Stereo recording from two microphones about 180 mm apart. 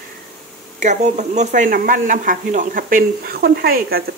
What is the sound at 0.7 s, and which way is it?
Speech, 40° right (ahead or behind).